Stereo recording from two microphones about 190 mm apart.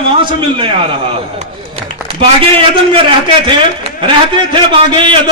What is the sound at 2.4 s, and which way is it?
A man's voice, 30° right (ahead or behind).